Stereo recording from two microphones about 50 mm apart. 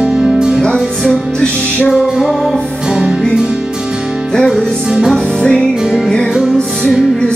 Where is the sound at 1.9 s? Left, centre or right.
Centre.